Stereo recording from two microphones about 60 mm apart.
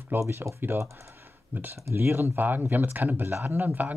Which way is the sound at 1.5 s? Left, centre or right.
Right.